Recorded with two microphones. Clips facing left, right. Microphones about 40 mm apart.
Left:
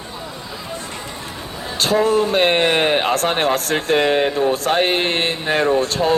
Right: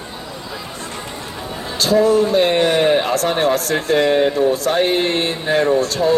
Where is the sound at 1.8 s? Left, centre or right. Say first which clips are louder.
Right 2 dB; left.